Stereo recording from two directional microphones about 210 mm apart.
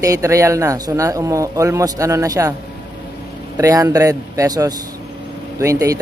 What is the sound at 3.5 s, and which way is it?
Speech, 15° right (ahead or behind).